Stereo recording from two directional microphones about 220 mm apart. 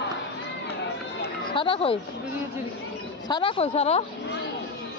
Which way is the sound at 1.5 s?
25° left (ahead or behind).